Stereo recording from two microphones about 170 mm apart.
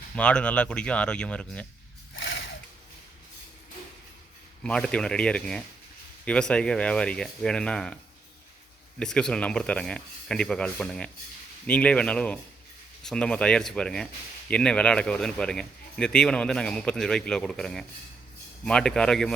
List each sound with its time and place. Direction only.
0.2 s speech: 5° left (ahead or behind)
2.1 s a sound: 90° left
4.6 s speech: 5° left (ahead or behind)
9.0 s speech: 5° left (ahead or behind)